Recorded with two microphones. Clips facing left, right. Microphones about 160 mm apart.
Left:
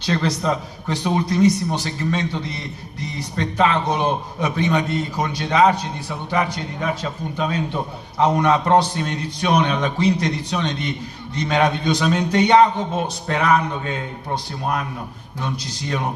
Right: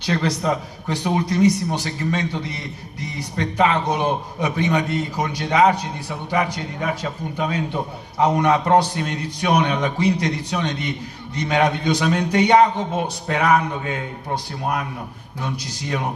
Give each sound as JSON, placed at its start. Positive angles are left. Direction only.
{"t": 0.0, "sound": "a man's voice", "side_deg": -15}